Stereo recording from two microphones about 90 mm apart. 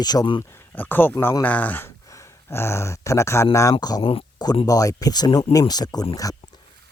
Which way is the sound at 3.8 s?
45° left (ahead or behind).